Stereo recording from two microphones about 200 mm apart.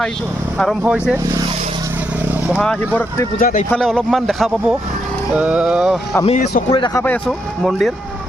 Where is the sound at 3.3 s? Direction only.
45° left (ahead or behind).